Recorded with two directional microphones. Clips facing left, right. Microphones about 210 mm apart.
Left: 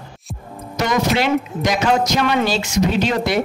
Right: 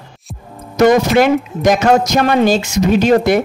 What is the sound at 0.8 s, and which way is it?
Speech, 50° right (ahead or behind).